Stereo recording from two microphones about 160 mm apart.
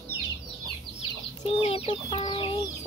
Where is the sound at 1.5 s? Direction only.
35° left (ahead or behind).